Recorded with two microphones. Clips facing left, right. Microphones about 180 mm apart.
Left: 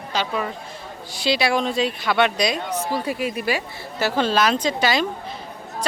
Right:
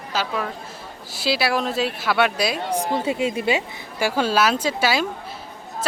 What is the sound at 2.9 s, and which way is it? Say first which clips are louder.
Speech: right 2 dB; 25° right (ahead or behind).